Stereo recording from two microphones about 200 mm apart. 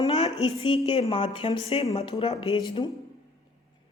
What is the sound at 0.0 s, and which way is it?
A woman's voice, 25° left (ahead or behind).